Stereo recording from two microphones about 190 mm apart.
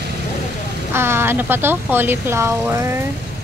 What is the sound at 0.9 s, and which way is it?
A woman's voice, 15° right (ahead or behind).